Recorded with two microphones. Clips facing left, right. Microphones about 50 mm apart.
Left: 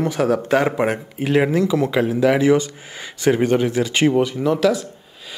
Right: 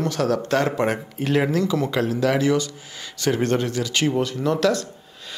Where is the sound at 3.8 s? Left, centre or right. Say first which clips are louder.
Left 5 dB; left.